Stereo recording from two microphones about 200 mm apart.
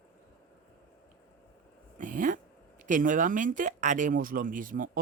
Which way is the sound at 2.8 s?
40° right (ahead or behind).